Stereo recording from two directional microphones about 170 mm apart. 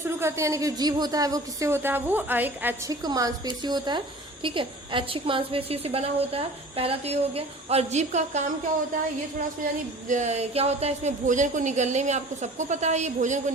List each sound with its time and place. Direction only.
0.2 s a woman's voice: 15° right (ahead or behind); by 8.4 s 40° right (ahead or behind)
10.1 s a woman's voice: 45° right (ahead or behind)